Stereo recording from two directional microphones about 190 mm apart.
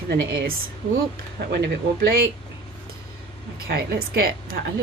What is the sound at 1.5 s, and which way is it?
Speech, 55° right (ahead or behind).